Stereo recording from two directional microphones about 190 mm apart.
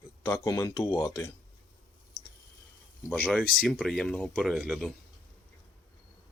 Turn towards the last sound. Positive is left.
turn(degrees=0)  # may be behind; listen again after turning